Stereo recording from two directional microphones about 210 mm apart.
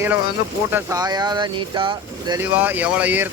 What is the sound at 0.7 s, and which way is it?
Speech, 10° right (ahead or behind).